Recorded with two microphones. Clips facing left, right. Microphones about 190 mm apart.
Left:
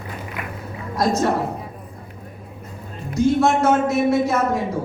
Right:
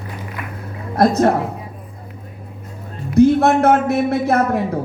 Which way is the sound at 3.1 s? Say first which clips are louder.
Right 5 dB; 60° right (ahead or behind).